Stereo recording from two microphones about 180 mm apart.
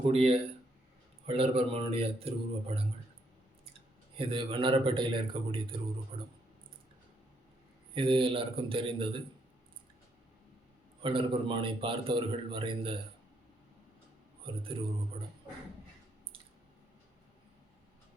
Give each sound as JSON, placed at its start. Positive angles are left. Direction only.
{"t": 0.0, "sound": "speech", "side_deg": -35}
{"t": 4.2, "sound": "a man's voice", "side_deg": -30}
{"t": 7.9, "sound": "a man's voice", "side_deg": -30}
{"t": 11.0, "sound": "a man's voice", "side_deg": -30}
{"t": 14.4, "sound": "a man's voice", "side_deg": -30}